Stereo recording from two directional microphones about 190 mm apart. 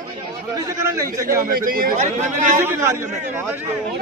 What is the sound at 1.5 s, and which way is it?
A man's voice, 50° right (ahead or behind).